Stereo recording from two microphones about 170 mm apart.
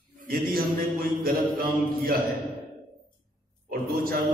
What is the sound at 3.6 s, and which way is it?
Speech, 60° right (ahead or behind).